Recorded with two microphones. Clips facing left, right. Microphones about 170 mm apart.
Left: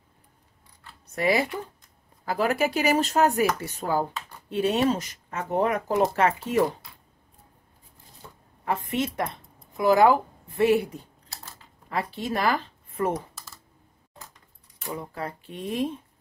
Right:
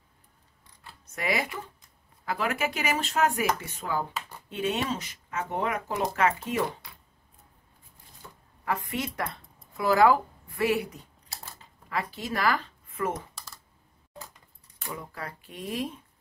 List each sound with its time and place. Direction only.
1.1 s speech: 30° left (ahead or behind)
8.6 s speech: 25° left (ahead or behind)
14.9 s speech: 25° left (ahead or behind)